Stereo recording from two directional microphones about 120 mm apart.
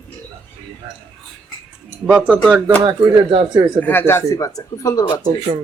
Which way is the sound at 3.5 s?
35° right (ahead or behind).